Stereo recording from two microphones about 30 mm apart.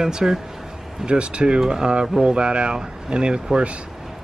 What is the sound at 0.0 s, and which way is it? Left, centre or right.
Speech, centre.